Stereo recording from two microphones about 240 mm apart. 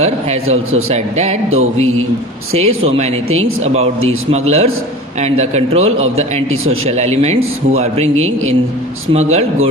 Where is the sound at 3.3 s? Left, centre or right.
Right.